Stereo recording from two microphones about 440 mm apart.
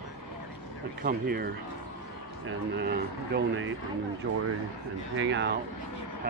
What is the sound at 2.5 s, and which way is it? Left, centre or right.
Speech, right.